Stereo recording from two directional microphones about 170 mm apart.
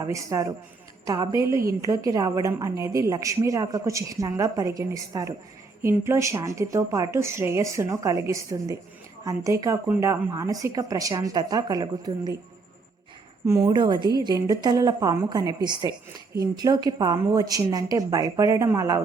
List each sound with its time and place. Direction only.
0.0 s a woman's voice: 20° right (ahead or behind)
13.4 s a woman's voice: 15° right (ahead or behind)